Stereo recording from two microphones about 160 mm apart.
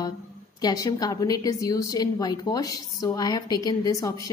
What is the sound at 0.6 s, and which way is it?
A woman's voice, 25° left (ahead or behind).